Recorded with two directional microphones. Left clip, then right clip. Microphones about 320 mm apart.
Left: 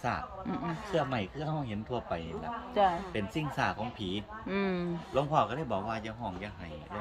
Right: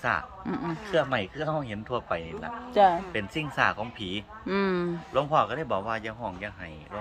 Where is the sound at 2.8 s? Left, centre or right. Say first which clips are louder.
Right 7 dB; centre.